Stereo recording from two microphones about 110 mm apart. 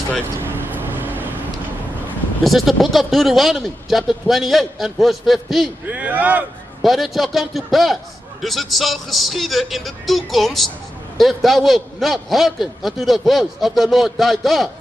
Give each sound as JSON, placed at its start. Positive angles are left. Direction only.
{"t": 0.4, "sound": "vehicle", "side_deg": -20}
{"t": 2.4, "sound": "a man's voice", "side_deg": 0}
{"t": 5.9, "sound": "speech", "side_deg": -15}
{"t": 6.8, "sound": "a man's voice", "side_deg": 0}